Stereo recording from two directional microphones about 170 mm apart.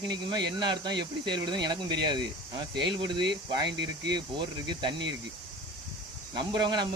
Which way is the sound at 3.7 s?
85° right.